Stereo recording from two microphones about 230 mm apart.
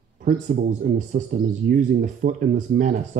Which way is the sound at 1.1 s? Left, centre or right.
Right.